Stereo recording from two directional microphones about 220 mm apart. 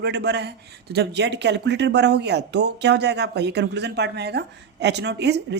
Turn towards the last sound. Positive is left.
turn(degrees=-50)  # may be behind; listen again after turning